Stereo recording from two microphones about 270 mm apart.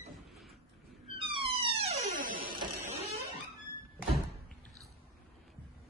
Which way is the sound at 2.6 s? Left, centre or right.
Centre.